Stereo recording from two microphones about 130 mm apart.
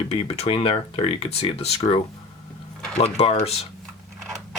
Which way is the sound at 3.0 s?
50° left (ahead or behind).